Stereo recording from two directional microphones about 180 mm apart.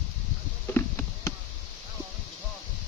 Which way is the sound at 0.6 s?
10° left (ahead or behind).